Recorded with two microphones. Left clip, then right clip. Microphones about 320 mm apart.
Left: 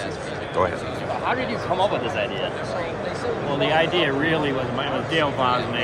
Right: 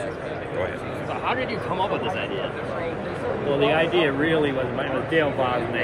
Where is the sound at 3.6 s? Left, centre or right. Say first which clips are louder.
Left 1 dB; centre.